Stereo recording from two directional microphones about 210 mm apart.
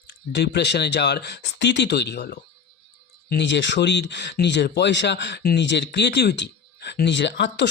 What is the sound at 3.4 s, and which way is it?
Speech, 60° left (ahead or behind).